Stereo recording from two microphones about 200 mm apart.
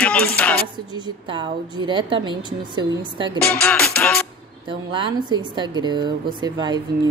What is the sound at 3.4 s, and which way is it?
Music, 5° left (ahead or behind).